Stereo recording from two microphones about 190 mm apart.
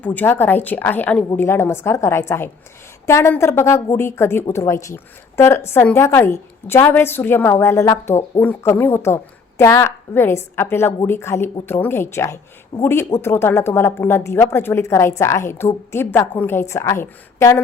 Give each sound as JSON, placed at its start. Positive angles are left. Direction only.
{"t": 0.0, "sound": "a woman's voice", "side_deg": 10}